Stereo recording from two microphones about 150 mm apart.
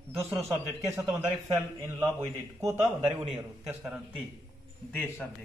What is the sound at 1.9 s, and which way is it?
A man's voice, 15° right (ahead or behind).